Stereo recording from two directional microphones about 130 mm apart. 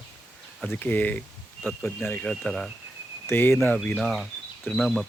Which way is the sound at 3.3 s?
15° left (ahead or behind).